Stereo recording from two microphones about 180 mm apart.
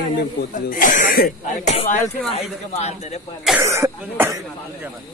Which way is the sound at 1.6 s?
40° left (ahead or behind).